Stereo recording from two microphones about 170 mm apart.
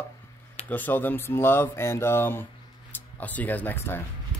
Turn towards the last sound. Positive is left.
turn(degrees=15)  # may be behind; listen again after turning